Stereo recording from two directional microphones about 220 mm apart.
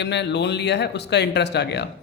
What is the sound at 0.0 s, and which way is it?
Speech, 50° left (ahead or behind).